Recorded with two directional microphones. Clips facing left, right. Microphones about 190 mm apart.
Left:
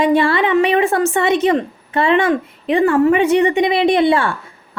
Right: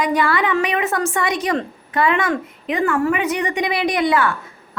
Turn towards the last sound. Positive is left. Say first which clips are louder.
# left 4 dB
turn(degrees=25)  # may be behind; listen again after turning